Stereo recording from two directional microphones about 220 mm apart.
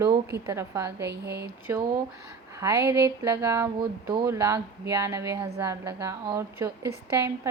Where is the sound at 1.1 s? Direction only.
50° right (ahead or behind).